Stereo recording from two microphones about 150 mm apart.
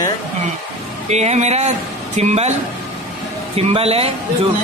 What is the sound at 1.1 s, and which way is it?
A man's voice, 50° right (ahead or behind).